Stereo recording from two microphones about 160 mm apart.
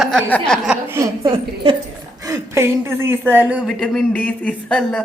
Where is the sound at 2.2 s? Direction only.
20° right (ahead or behind).